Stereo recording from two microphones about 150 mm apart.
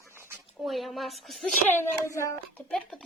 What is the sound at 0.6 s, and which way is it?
Speech, centre (ahead or behind).